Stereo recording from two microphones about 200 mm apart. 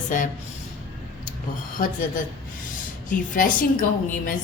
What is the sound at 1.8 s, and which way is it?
Speech, 35° left (ahead or behind).